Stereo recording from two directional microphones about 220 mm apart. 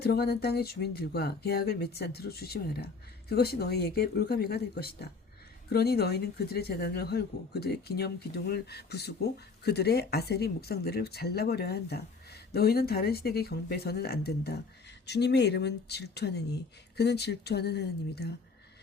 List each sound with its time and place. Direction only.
0.0 s speech: 45° left (ahead or behind)